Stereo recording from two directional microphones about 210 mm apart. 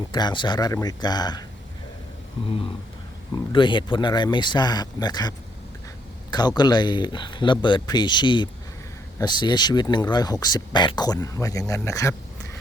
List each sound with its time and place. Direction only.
0.1 s speech: 20° left (ahead or behind)
3.5 s speech: 25° left (ahead or behind)
6.6 s speech: 20° left (ahead or behind)